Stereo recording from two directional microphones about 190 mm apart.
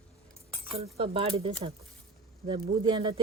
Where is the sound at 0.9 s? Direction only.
30° right (ahead or behind).